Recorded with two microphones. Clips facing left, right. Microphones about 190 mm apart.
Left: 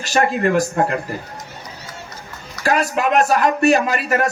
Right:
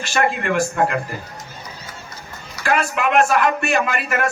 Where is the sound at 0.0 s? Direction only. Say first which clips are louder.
Left 3 dB; 40° left (ahead or behind).